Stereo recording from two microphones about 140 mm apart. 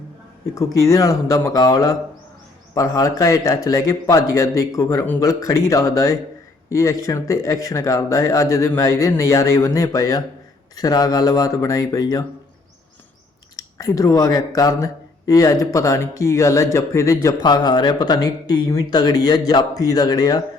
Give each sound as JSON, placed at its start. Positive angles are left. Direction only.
{"t": 0.5, "sound": "speech", "side_deg": 20}
{"t": 13.6, "sound": "speech", "side_deg": 25}